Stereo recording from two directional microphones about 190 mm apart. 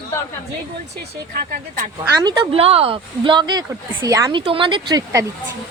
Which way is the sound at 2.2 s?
25° right (ahead or behind).